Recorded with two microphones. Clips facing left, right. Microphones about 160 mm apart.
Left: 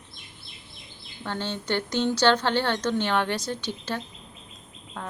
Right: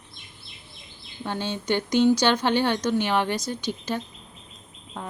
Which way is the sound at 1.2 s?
15° right (ahead or behind).